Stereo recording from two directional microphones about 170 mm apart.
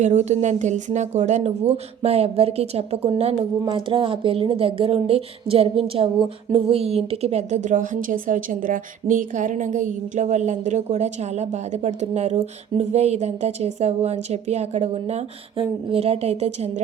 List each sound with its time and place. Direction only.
0.0 s a woman's voice: 40° right (ahead or behind)